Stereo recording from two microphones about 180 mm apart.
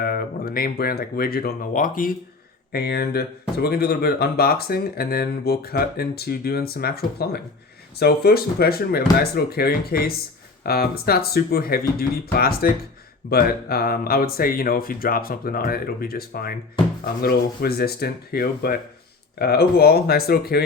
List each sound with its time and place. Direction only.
0.0 s speech: 55° left (ahead or behind)
2.7 s speech: 60° left (ahead or behind)